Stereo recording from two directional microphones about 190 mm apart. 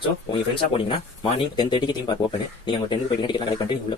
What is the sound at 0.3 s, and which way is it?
Speech, 25° left (ahead or behind).